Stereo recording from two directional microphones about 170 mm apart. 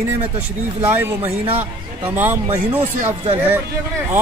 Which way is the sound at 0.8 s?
10° right (ahead or behind).